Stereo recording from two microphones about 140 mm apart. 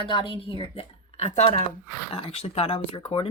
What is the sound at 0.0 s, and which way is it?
A woman's voice, 35° left (ahead or behind).